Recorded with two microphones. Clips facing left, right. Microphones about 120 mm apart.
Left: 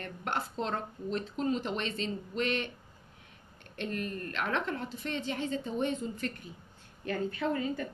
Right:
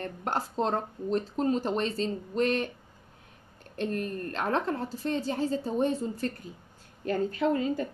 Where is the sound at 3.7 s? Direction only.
35° right (ahead or behind).